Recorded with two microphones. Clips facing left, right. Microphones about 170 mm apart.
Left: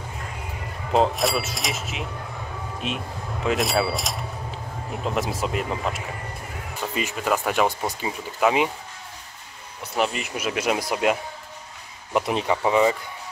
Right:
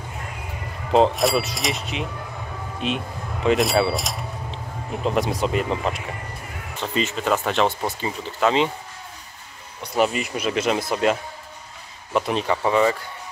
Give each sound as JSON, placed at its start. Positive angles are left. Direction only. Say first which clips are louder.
{"t": 0.9, "sound": "speech", "louder": "right 3 dB", "side_deg": 0}
{"t": 9.9, "sound": "speech", "louder": "right 4 dB", "side_deg": 0}